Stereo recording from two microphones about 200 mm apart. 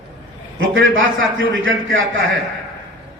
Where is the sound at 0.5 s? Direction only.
75° right (ahead or behind).